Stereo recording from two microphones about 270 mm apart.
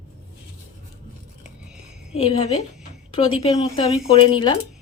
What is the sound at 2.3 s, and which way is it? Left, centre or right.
Speech, left.